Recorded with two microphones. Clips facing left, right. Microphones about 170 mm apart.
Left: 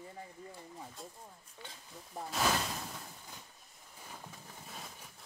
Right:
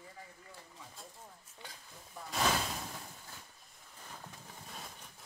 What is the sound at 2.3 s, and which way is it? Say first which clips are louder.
Speech: even; centre (ahead or behind).